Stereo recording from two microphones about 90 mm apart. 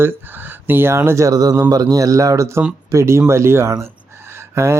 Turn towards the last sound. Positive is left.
turn(degrees=-30)  # may be behind; listen again after turning